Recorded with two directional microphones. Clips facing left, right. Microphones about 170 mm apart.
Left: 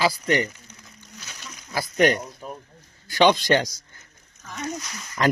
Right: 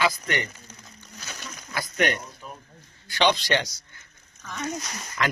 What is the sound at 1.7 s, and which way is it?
A man's voice, 35° left (ahead or behind).